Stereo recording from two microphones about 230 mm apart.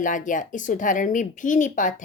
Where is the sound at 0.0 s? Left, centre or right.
Left.